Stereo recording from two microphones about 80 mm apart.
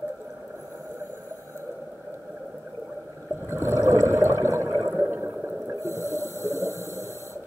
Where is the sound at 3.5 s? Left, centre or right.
Right.